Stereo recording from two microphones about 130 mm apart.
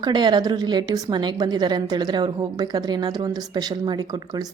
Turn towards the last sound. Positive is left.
turn(degrees=-30)  # may be behind; listen again after turning